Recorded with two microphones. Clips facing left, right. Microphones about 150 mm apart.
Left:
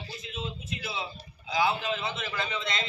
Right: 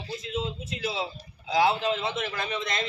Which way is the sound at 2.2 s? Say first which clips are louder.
Right 2 dB; 55° right (ahead or behind).